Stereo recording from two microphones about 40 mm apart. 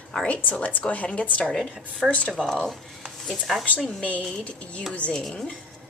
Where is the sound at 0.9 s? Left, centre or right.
Left.